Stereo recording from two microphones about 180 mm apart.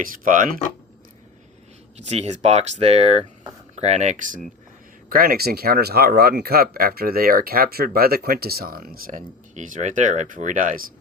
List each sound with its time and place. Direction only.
0.0 s speech: 50° right (ahead or behind)
2.0 s speech: 35° right (ahead or behind)
5.0 s speech: 55° right (ahead or behind)